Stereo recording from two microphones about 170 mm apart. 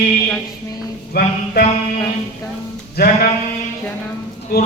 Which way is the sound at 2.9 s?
65° left (ahead or behind).